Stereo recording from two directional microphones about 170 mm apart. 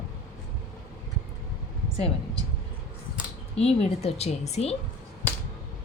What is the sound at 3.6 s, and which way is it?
A woman's voice, 35° left (ahead or behind).